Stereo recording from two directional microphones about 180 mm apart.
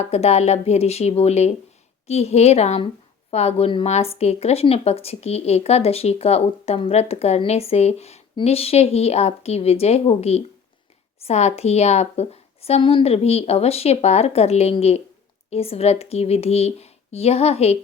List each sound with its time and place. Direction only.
0.0 s a woman's voice: 35° left (ahead or behind)